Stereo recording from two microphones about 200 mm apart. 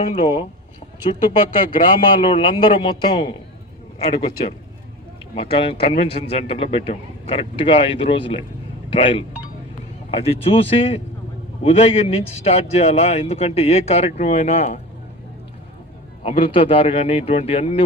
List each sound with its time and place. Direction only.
0.0 s speech: 30° left (ahead or behind)
1.7 s speech: 25° left (ahead or behind)
5.3 s a man's voice: 30° left (ahead or behind)
16.2 s a man's voice: 30° left (ahead or behind)